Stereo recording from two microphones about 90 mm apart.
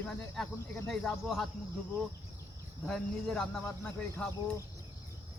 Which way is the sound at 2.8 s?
5° left (ahead or behind).